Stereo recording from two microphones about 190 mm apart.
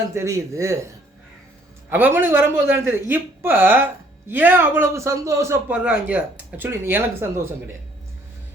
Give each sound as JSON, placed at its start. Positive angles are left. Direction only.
{"t": 0.1, "sound": "a man's voice", "side_deg": -15}
{"t": 1.9, "sound": "a man's voice", "side_deg": -10}